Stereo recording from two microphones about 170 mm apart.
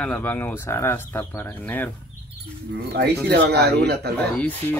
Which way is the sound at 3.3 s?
75° right (ahead or behind).